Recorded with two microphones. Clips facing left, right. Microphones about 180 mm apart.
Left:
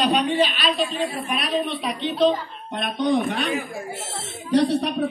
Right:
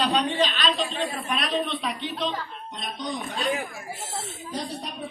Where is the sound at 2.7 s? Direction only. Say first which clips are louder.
Left 12 dB; 60° left (ahead or behind).